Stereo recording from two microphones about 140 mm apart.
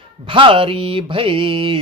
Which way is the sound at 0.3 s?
40° right (ahead or behind).